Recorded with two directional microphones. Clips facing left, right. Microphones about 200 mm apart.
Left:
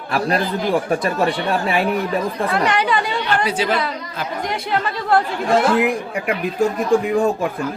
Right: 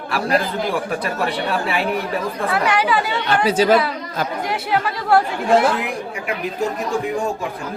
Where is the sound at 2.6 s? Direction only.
5° right (ahead or behind).